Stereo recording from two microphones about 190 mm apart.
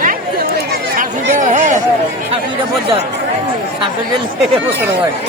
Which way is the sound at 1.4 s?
40° right (ahead or behind).